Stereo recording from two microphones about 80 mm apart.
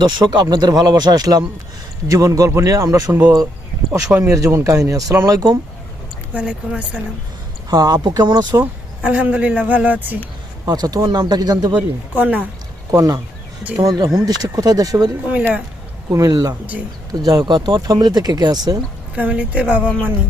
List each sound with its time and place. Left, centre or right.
0.0 s speech: right
4.2 s speech: right
6.3 s a woman's voice: centre
7.7 s speech: right
9.0 s a woman's voice: centre
10.7 s speech: right
11.8 s speech: centre
12.9 s speech: right
15.3 s a woman's voice: centre
16.1 s speech: right
19.1 s a woman's voice: centre